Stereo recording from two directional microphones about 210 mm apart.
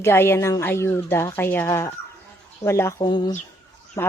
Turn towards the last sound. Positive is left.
turn(degrees=15)  # may be behind; listen again after turning